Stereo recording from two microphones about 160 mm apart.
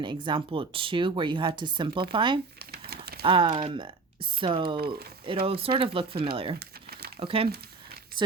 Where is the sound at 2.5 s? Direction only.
80° right.